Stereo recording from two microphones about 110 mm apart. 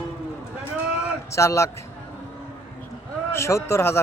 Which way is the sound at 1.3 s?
25° left (ahead or behind).